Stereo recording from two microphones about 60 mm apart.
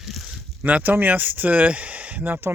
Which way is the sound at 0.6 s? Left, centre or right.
Right.